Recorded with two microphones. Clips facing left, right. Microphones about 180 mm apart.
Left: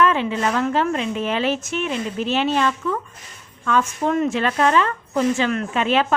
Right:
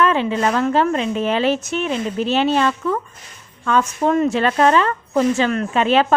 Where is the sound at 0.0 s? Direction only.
35° right (ahead or behind).